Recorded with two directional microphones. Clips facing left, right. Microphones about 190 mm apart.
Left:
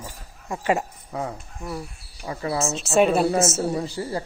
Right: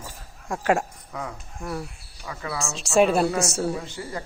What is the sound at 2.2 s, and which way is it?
Speech, 30° left (ahead or behind).